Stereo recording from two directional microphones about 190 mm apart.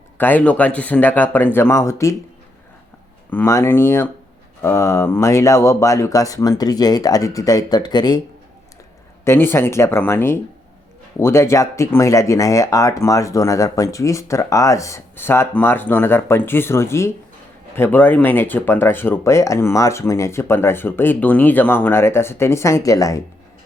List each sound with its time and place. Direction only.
0.2 s speech: 10° left (ahead or behind)
3.2 s speech: 15° left (ahead or behind)
9.2 s speech: 10° left (ahead or behind)